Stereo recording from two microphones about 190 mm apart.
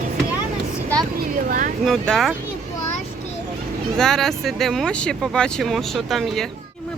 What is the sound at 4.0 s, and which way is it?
Speech, centre (ahead or behind).